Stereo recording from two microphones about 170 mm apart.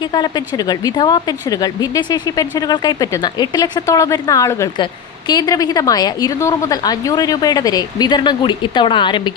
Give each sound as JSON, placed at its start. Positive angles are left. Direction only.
{"t": 0.0, "sound": "speech", "side_deg": 25}